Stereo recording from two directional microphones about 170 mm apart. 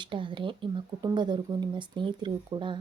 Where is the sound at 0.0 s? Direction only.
30° right (ahead or behind).